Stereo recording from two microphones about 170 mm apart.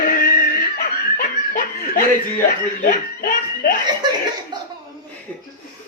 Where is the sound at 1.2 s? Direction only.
55° left (ahead or behind).